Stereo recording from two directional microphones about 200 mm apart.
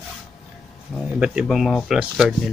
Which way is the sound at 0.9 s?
5° right (ahead or behind).